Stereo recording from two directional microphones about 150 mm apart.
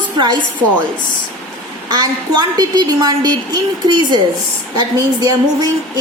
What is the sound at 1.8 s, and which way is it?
A woman's voice, 25° right (ahead or behind).